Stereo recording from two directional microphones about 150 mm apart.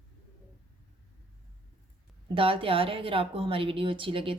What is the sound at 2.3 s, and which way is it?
A woman's voice, 40° right (ahead or behind).